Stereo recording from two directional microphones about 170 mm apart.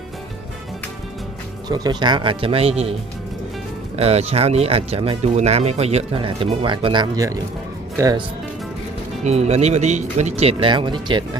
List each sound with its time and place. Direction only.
1.6 s speech: 25° right (ahead or behind)
3.9 s speech: 35° right (ahead or behind); by 8.2 s 20° right (ahead or behind)
9.2 s speech: 40° right (ahead or behind)